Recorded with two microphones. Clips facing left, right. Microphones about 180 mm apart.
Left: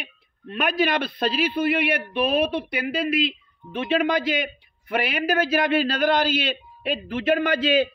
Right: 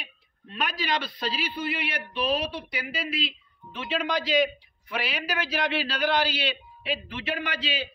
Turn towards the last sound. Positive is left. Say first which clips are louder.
# left 12 dB
turn(degrees=50)  # may be behind; listen again after turning